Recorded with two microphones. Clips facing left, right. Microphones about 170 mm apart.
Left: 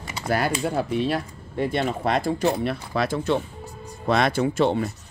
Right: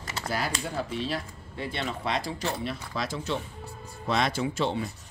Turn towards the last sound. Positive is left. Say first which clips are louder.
# left 7 dB
turn(degrees=55)  # may be behind; listen again after turning